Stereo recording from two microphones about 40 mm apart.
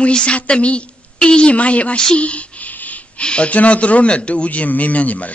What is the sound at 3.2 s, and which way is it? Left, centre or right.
Speech, left.